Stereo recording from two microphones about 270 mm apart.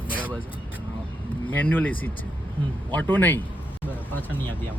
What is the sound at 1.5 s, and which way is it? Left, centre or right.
Speech, centre.